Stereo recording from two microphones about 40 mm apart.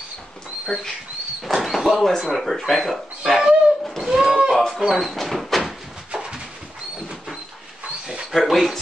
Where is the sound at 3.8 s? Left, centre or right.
Centre.